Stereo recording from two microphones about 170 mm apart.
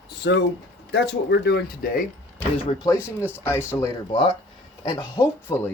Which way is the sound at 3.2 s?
10° right (ahead or behind).